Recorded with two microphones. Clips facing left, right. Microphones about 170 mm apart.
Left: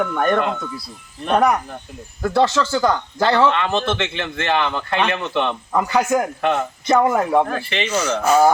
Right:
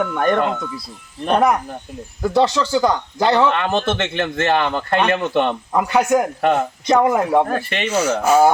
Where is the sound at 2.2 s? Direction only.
10° right (ahead or behind).